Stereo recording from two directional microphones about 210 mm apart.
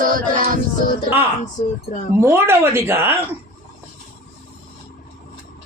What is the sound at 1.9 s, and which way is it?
Speech, 35° left (ahead or behind).